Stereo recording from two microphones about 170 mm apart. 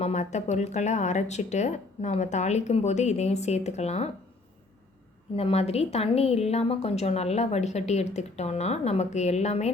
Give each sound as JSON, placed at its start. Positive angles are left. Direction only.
{"t": 0.0, "sound": "speech", "side_deg": 40}
{"t": 5.4, "sound": "a woman's voice", "side_deg": 35}